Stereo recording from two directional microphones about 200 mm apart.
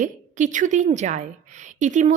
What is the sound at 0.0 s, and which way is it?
A woman's voice, 40° right (ahead or behind).